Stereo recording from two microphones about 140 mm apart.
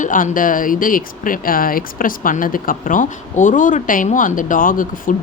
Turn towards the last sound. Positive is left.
turn(degrees=75)  # may be behind; listen again after turning